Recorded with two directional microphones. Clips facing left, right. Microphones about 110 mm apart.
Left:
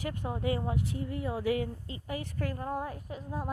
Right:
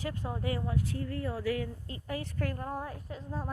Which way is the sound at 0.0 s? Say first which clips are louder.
Left 2 dB; 15° left (ahead or behind).